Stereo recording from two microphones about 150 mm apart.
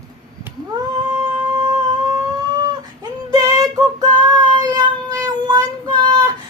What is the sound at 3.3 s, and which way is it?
Child singing, 25° right (ahead or behind).